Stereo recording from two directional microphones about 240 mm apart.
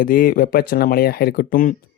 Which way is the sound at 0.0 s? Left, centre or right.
Left.